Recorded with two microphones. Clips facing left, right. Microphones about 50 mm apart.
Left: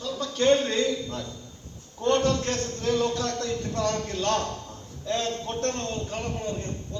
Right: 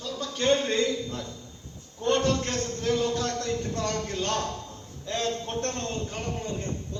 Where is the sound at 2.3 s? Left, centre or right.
Right.